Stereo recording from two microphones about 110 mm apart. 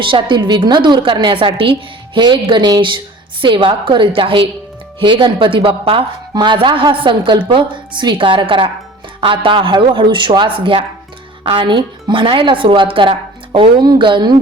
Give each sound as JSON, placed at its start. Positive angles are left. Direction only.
{"t": 0.0, "sound": "speech", "side_deg": -50}